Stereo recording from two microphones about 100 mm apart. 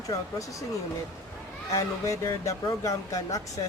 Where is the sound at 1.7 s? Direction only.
35° left (ahead or behind).